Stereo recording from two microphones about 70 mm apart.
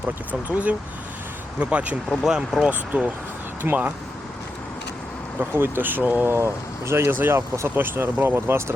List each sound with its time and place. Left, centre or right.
0.3 s speech: right
2.2 s speech: centre
2.6 s speech: right
5.4 s speech: right
6.3 s speech: right